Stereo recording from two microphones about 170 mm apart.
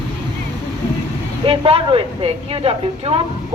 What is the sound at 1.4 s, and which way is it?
A woman's voice, 30° right (ahead or behind).